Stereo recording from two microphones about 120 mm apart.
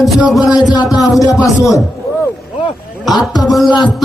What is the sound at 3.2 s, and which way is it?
Speech, 35° left (ahead or behind).